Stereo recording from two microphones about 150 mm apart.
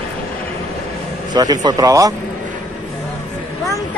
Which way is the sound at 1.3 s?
25° right (ahead or behind).